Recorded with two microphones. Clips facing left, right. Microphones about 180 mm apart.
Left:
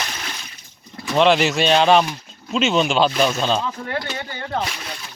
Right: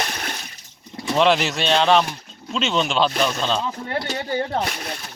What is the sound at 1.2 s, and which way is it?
Speech, centre (ahead or behind).